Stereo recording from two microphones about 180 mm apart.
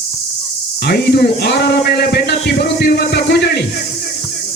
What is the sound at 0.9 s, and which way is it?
A man's voice, 65° left (ahead or behind).